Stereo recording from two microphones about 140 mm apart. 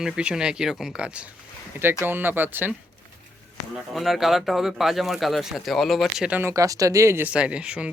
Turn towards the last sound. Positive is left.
turn(degrees=-10)  # may be behind; listen again after turning